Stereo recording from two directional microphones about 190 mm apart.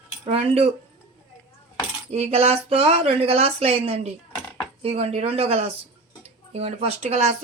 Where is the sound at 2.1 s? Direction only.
30° right (ahead or behind).